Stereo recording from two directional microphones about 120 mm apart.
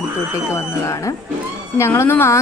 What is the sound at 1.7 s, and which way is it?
Speech, 25° left (ahead or behind).